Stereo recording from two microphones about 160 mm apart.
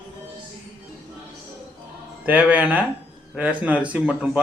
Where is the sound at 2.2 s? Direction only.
10° right (ahead or behind).